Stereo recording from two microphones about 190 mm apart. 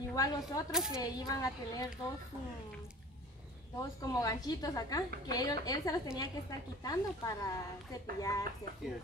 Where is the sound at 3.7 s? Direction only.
20° left (ahead or behind).